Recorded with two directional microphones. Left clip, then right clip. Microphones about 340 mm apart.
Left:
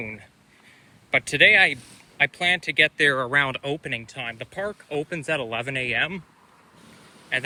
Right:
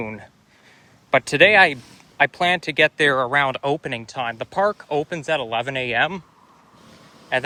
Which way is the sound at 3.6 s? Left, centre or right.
Right.